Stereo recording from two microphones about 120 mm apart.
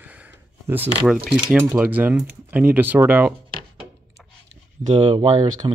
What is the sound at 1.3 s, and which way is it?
Speech, 20° right (ahead or behind).